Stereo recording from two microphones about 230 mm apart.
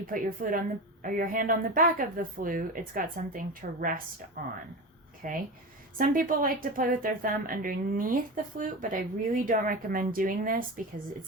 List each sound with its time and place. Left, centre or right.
0.1 s a woman's voice: right